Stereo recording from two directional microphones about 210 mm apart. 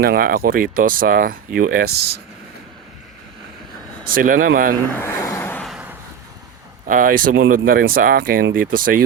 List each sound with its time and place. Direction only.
0.0 s speech: 45° right (ahead or behind)
4.1 s speech: 40° right (ahead or behind)
4.9 s vehicle: 10° left (ahead or behind); by 6.0 s 5° right (ahead or behind)
6.8 s speech: 40° right (ahead or behind)